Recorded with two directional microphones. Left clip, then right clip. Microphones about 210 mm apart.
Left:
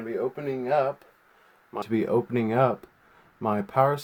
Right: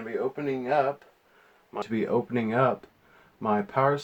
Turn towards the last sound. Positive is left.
turn(degrees=50)  # may be behind; listen again after turning